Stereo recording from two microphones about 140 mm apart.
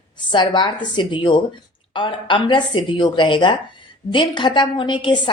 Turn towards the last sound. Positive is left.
turn(degrees=35)  # may be behind; listen again after turning